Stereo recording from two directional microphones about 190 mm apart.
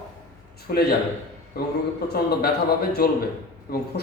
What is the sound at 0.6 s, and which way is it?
A man's voice, 55° left (ahead or behind).